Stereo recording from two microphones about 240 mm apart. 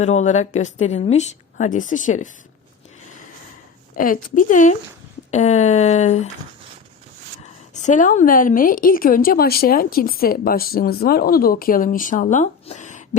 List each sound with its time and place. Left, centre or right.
0.0 s a woman's voice: left
3.9 s a woman's voice: left
7.7 s a woman's voice: left